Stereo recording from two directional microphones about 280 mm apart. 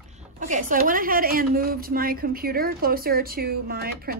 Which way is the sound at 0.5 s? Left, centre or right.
Right.